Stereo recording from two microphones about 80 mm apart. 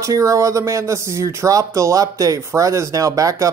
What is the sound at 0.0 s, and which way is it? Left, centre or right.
Speech, right.